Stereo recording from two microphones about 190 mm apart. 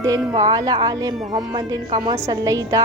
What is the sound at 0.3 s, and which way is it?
A woman's voice, 20° right (ahead or behind).